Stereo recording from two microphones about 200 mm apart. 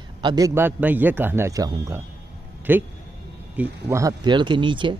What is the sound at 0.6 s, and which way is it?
Speech, 10° right (ahead or behind).